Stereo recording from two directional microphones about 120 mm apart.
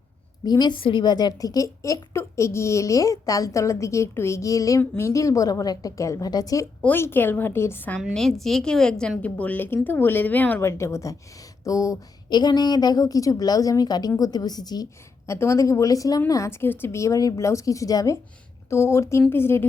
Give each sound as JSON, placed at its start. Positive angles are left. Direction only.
{"t": 0.4, "sound": "a woman's voice", "side_deg": 35}
{"t": 6.8, "sound": "a woman's voice", "side_deg": 20}
{"t": 8.1, "sound": "a woman's voice", "side_deg": 5}
{"t": 15.3, "sound": "a woman's voice", "side_deg": 25}